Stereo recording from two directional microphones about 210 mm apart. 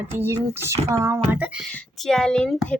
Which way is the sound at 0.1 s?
10° right (ahead or behind).